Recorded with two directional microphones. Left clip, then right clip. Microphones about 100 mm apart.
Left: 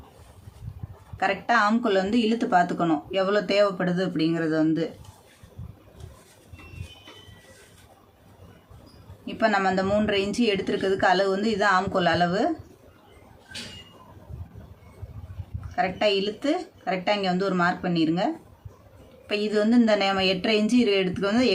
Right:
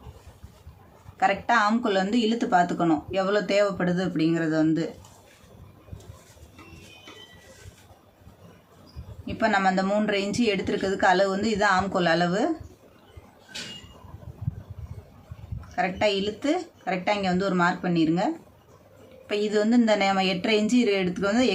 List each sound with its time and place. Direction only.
1.2 s speech: 20° left (ahead or behind)
9.2 s speech: 15° left (ahead or behind)
15.7 s speech: 10° left (ahead or behind)
19.3 s a woman's voice: 15° left (ahead or behind)